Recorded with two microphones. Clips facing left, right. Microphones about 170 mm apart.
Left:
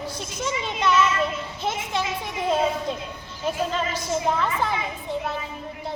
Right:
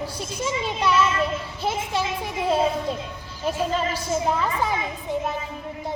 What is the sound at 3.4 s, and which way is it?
A child's voice, 5° right (ahead or behind).